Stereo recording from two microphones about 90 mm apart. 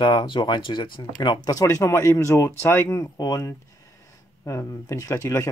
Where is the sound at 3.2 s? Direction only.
45° left (ahead or behind).